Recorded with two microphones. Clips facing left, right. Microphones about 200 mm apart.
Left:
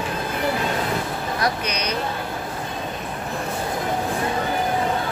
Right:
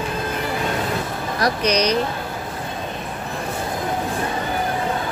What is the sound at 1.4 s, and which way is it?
Speech, 35° right (ahead or behind).